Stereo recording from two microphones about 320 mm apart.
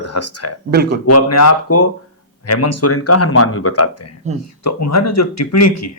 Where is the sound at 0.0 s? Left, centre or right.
Left.